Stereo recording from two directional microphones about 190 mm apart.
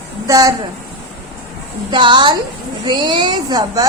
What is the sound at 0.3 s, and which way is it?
Speech, 20° right (ahead or behind).